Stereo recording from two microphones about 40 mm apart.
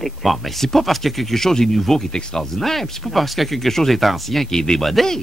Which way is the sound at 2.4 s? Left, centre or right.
Centre.